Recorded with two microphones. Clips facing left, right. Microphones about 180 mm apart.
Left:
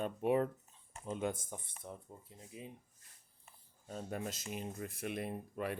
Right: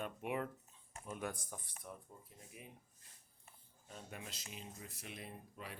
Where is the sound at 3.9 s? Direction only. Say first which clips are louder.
Left 10 dB; 40° left (ahead or behind); by 5.8 s 55° left (ahead or behind).